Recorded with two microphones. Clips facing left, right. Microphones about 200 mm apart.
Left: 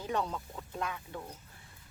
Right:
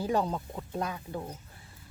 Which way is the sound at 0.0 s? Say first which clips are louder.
Right 5 dB; 35° right (ahead or behind).